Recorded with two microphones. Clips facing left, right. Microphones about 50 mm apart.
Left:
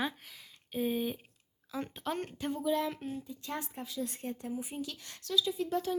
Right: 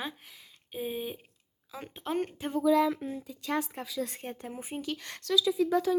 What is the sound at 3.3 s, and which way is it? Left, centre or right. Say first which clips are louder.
Speech: right 7 dB; right.